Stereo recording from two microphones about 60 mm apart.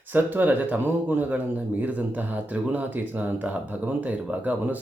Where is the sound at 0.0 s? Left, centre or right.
Right.